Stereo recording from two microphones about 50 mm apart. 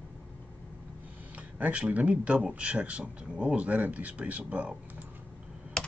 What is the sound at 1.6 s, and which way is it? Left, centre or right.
Speech, right.